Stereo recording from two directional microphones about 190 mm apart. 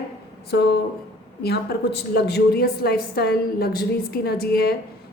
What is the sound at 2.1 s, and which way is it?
A woman's voice, 55° left (ahead or behind).